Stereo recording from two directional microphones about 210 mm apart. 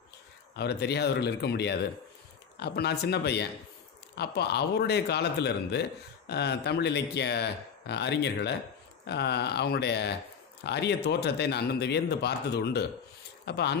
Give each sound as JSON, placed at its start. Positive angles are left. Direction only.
{"t": 0.6, "sound": "speech", "side_deg": 50}